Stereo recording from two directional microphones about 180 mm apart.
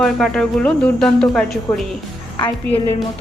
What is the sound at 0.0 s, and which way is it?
Speech, 5° left (ahead or behind).